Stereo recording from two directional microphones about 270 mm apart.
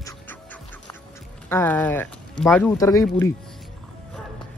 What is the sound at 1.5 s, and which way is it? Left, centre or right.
Speech, centre.